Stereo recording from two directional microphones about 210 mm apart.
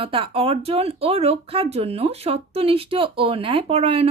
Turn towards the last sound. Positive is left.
turn(degrees=-30)  # may be behind; listen again after turning